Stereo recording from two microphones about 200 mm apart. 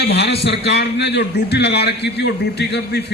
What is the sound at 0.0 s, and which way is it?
A man's voice, 55° left (ahead or behind).